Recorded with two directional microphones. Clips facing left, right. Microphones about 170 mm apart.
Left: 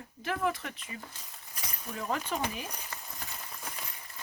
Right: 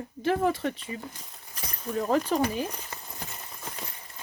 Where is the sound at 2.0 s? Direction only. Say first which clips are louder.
Right 8 dB; 35° right (ahead or behind).